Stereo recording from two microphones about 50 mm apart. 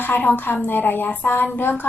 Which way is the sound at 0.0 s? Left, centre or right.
Left.